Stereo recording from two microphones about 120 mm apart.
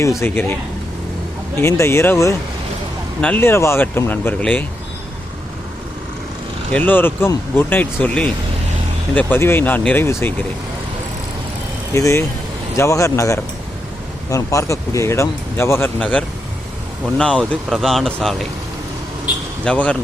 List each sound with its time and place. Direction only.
0.2 s speech: 20° left (ahead or behind)
1.5 s speech: 20° left (ahead or behind)
6.7 s speech: 15° left (ahead or behind)
11.9 s speech: 25° left (ahead or behind); by 18.4 s centre (ahead or behind)
19.6 s speech: 10° left (ahead or behind)